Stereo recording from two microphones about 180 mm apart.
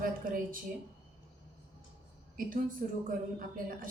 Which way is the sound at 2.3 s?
50° right (ahead or behind).